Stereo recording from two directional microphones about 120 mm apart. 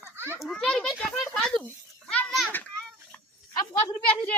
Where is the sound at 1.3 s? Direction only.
5° left (ahead or behind).